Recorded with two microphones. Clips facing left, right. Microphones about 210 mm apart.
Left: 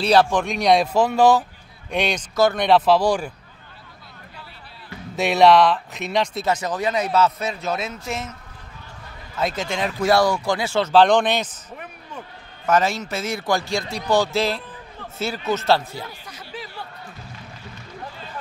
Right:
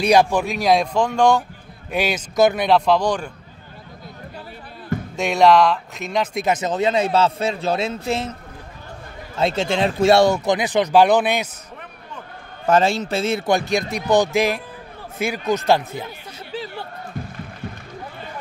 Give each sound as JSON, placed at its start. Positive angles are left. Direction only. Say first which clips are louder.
{"t": 0.0, "sound": "speech", "louder": "right 1 dB", "side_deg": -15}
{"t": 1.9, "sound": "speech", "louder": "right 1 dB", "side_deg": -5}
{"t": 5.1, "sound": "speech", "louder": "even", "side_deg": 0}
{"t": 6.3, "sound": "a man's voice", "louder": "right 3 dB", "side_deg": -20}
{"t": 9.4, "sound": "a man's voice", "louder": "right 5 dB", "side_deg": -25}
{"t": 12.6, "sound": "a man's voice", "louder": "right 3 dB", "side_deg": -30}